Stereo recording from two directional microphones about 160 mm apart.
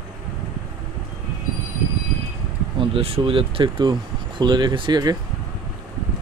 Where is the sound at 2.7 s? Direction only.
35° right (ahead or behind).